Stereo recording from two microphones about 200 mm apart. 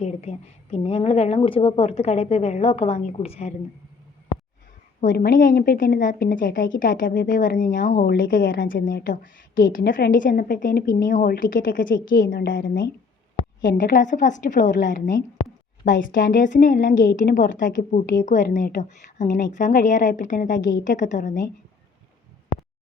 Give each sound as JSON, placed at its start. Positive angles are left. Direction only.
{"t": 0.0, "sound": "a woman's voice", "side_deg": 30}
{"t": 4.9, "sound": "a woman's voice", "side_deg": 45}